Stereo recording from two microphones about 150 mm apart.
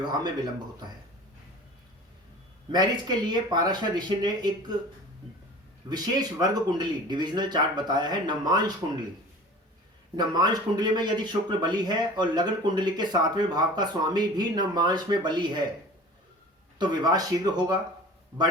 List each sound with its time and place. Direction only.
0.0 s a man's voice: 25° right (ahead or behind)
2.7 s a man's voice: 30° right (ahead or behind)
5.9 s a man's voice: 25° right (ahead or behind)
10.2 s a man's voice: 25° right (ahead or behind)
16.7 s a man's voice: 25° right (ahead or behind)